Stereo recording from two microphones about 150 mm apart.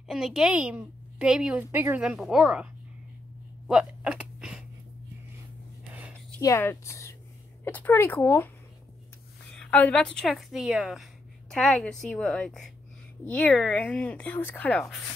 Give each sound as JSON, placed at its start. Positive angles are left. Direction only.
{"t": 0.1, "sound": "a woman's voice", "side_deg": 0}
{"t": 3.6, "sound": "a sound", "side_deg": -5}
{"t": 6.4, "sound": "a woman's voice", "side_deg": 20}
{"t": 9.6, "sound": "a woman's voice", "side_deg": 10}